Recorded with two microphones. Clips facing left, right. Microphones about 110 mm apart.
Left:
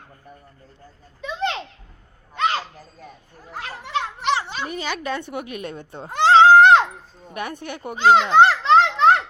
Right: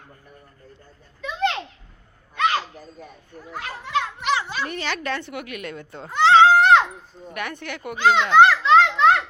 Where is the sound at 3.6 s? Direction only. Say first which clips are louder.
Right 1 dB; 30° left (ahead or behind).